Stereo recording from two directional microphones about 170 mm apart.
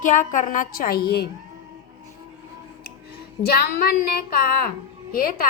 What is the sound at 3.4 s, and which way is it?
Female singing, 65° left (ahead or behind).